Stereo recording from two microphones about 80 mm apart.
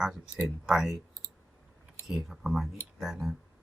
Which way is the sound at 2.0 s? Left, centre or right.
Centre.